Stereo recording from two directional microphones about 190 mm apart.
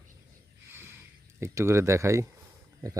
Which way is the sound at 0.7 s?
10° right (ahead or behind).